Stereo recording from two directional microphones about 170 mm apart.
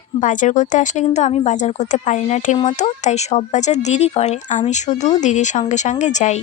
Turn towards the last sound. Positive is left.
turn(degrees=45)  # may be behind; listen again after turning